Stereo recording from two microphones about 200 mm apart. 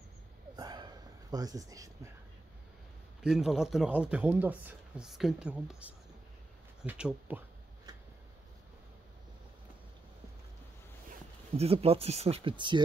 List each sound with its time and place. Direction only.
0.6 s whispering: 20° right (ahead or behind)
3.2 s speech: centre (ahead or behind)
11.5 s speech: 30° right (ahead or behind)